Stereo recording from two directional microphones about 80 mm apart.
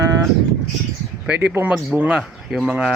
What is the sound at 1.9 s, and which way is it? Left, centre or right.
Speech, centre.